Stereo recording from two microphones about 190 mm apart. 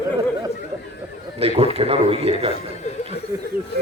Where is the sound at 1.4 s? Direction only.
30° right (ahead or behind).